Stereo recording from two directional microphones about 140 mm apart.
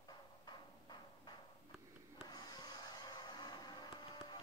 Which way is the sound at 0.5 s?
30° left (ahead or behind).